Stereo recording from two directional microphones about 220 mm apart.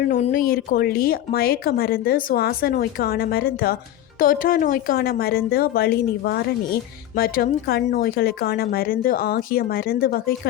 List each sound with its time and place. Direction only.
0.1 s speech: 40° left (ahead or behind)